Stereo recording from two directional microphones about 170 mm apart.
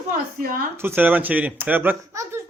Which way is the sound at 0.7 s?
10° right (ahead or behind).